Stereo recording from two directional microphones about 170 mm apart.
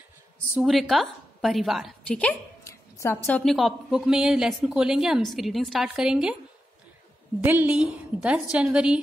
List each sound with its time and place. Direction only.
0.6 s a woman's voice: centre (ahead or behind)
2.6 s a woman's voice: 15° left (ahead or behind); by 6.3 s 5° right (ahead or behind)
7.4 s a woman's voice: 10° right (ahead or behind)